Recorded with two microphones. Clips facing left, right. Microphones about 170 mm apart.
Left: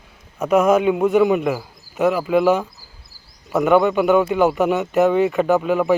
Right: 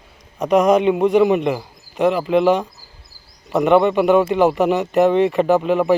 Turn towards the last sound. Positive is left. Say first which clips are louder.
# right 1 dB
turn(degrees=0)  # may be behind; listen again after turning